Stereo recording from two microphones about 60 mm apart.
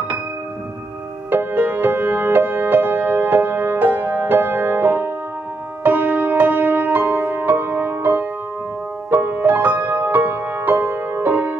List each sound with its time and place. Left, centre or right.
1.3 s music: right